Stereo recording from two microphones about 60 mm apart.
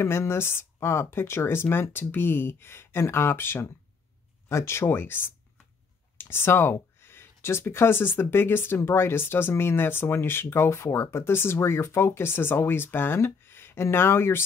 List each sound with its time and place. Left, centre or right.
0.0 s speech: left
4.8 s speech: left